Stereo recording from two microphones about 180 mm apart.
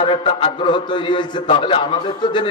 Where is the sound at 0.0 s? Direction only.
30° left (ahead or behind).